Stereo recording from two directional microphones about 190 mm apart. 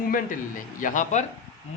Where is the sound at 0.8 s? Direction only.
40° left (ahead or behind).